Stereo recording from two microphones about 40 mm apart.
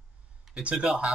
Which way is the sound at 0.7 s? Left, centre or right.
Right.